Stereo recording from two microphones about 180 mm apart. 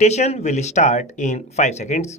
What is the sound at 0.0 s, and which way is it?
Speech, 40° left (ahead or behind).